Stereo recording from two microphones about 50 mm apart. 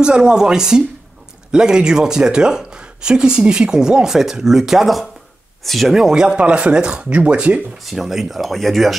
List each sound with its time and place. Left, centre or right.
0.0 s speech: centre
5.9 s speech: centre
7.8 s speech: centre